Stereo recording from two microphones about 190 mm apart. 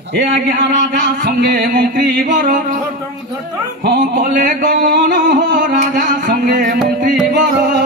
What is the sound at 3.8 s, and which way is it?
Music, 55° right (ahead or behind).